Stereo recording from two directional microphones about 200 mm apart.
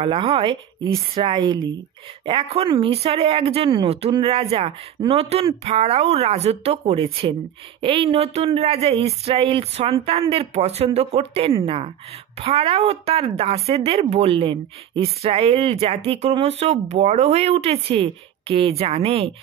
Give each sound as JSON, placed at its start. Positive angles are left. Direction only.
{"t": 0.0, "sound": "a woman's voice", "side_deg": -25}